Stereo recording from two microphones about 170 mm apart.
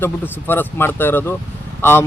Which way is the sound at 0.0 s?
10° left (ahead or behind).